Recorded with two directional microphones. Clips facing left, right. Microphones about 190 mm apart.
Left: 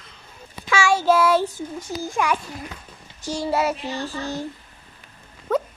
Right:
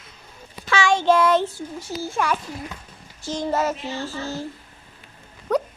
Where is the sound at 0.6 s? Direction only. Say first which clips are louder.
Even; 10° left (ahead or behind).